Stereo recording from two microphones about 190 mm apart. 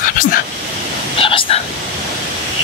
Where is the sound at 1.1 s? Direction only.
30° left (ahead or behind).